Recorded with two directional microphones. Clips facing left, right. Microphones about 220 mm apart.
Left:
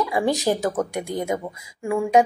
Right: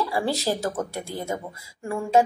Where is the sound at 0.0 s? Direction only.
15° left (ahead or behind).